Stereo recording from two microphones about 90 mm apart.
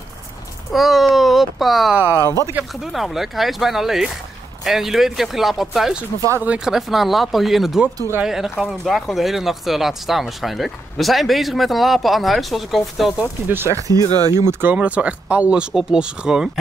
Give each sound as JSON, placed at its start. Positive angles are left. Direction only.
{"t": 0.7, "sound": "speech", "side_deg": 0}
{"t": 2.2, "sound": "speech", "side_deg": 35}
{"t": 2.7, "sound": "speech", "side_deg": 0}
{"t": 13.5, "sound": "speech", "side_deg": -25}
{"t": 13.7, "sound": "speech", "side_deg": -40}
{"t": 14.5, "sound": "speech", "side_deg": -20}